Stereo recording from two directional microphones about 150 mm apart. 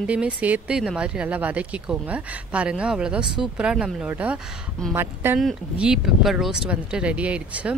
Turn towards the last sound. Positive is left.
turn(degrees=-10)  # may be behind; listen again after turning